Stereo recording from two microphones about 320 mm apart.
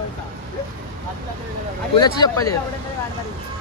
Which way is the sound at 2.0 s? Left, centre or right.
Centre.